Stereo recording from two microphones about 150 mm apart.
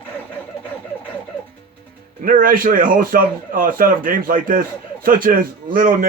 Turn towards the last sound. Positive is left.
turn(degrees=-65)  # may be behind; listen again after turning